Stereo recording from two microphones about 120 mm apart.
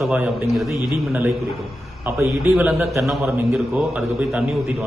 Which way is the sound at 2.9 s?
Centre (ahead or behind).